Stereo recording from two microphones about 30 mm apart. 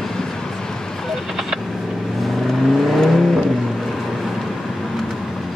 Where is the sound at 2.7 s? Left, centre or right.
Centre.